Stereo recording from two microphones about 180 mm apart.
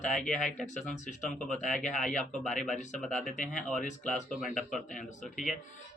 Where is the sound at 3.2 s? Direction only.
45° left (ahead or behind).